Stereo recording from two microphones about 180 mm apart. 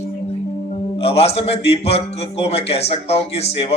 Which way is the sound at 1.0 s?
35° left (ahead or behind).